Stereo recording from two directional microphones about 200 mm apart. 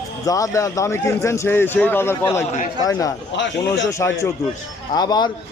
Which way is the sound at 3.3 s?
65° left (ahead or behind).